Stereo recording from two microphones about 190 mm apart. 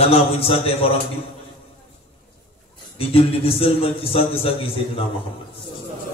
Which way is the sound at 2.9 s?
30° left (ahead or behind).